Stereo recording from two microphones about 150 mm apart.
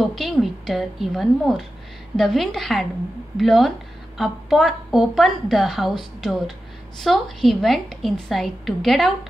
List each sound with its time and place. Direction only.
0.1 s a woman's voice: centre (ahead or behind)